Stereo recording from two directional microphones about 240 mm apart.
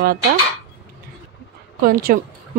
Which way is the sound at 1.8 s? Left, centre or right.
Right.